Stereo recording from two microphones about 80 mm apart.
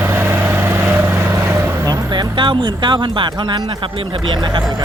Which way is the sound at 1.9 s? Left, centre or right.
Right.